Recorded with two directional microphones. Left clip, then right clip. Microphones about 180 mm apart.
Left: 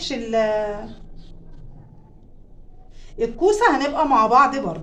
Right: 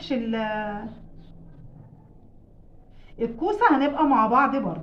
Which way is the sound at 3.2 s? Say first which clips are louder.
Left 5 dB; 35° left (ahead or behind).